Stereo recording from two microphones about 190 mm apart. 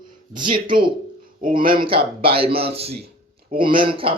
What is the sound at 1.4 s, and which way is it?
Speech, 50° right (ahead or behind).